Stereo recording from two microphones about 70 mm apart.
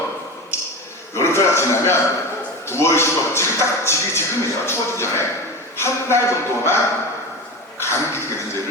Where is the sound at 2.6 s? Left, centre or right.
Left.